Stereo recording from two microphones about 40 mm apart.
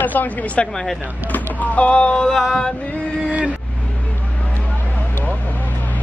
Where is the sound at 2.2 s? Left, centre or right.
Centre.